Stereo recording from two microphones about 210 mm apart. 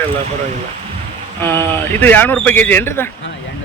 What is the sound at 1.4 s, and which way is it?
Speech, 10° left (ahead or behind).